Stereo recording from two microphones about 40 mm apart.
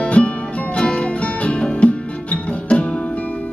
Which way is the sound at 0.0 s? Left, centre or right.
Left.